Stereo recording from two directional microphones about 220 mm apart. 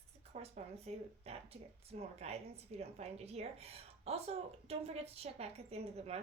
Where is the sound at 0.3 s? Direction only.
30° right (ahead or behind).